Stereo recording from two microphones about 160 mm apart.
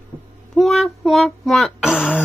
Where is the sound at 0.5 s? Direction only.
Centre (ahead or behind).